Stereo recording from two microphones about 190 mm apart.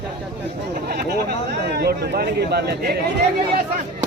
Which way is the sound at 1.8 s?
55° right (ahead or behind).